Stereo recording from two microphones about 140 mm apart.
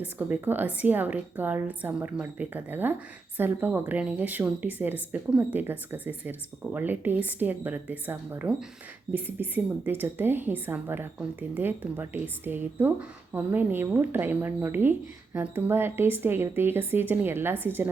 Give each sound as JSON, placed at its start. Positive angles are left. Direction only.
{"t": 0.0, "sound": "a woman's voice", "side_deg": -15}